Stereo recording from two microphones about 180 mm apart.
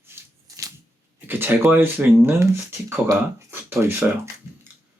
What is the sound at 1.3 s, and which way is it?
Speech, 10° right (ahead or behind).